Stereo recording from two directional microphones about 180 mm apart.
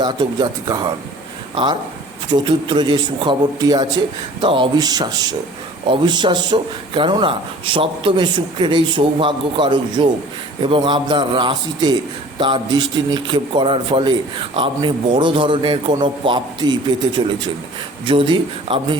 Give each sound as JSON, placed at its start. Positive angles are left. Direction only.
{"t": 0.0, "sound": "speech", "side_deg": -25}